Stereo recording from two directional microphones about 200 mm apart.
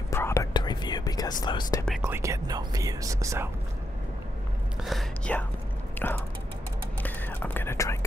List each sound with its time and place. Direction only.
0.1 s whispering: 15° left (ahead or behind)
2.0 s speech: 15° right (ahead or behind)
4.8 s speech: 5° left (ahead or behind)
7.0 s whispering: 10° left (ahead or behind)